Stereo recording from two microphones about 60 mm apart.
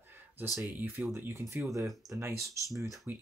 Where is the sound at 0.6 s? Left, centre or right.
Right.